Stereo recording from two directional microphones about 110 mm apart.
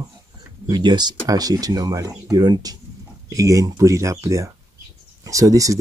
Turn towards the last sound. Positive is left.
turn(degrees=-30)  # may be behind; listen again after turning